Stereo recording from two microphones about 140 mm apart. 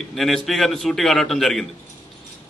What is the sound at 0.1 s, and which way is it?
A man's voice, centre (ahead or behind).